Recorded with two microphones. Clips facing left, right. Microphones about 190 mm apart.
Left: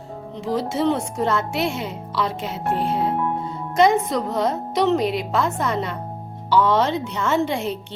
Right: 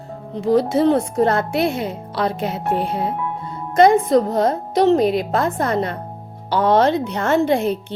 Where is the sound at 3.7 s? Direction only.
50° right (ahead or behind).